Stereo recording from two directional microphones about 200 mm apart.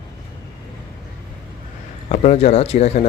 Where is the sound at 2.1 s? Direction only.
35° left (ahead or behind).